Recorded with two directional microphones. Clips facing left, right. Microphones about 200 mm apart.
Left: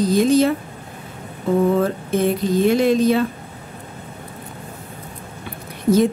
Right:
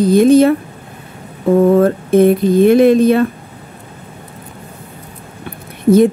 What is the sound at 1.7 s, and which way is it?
Speech, 55° right (ahead or behind).